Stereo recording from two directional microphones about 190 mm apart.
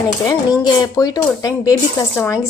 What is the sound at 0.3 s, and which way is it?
Speech, 20° left (ahead or behind).